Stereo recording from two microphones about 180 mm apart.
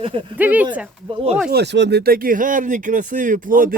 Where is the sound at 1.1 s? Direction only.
30° right (ahead or behind).